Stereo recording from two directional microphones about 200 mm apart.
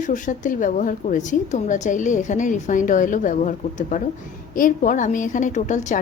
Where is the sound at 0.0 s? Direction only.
40° left (ahead or behind).